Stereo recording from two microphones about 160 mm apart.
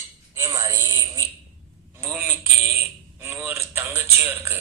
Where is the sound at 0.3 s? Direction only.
20° right (ahead or behind).